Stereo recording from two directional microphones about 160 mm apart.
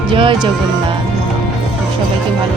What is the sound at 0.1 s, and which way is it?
Speech, 30° right (ahead or behind).